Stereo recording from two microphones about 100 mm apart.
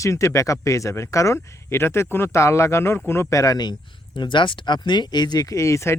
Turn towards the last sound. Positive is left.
turn(degrees=30)  # may be behind; listen again after turning